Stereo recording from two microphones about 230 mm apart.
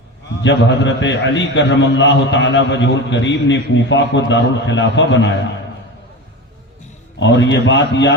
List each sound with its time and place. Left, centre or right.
0.4 s a man's voice: left
7.2 s a man's voice: left